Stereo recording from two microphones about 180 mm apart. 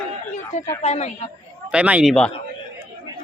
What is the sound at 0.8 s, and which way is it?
Speech, 35° left (ahead or behind).